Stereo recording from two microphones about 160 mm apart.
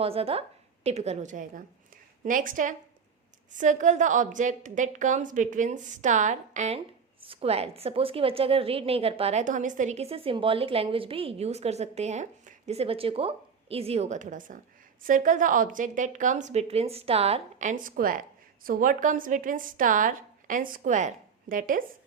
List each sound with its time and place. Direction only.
0.0 s a woman's voice: 35° right (ahead or behind); by 21.8 s 60° right (ahead or behind)